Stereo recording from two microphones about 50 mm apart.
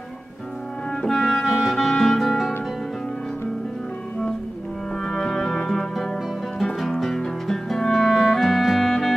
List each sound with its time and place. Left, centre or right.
1.0 s music: centre
1.4 s music: centre
5.0 s music: centre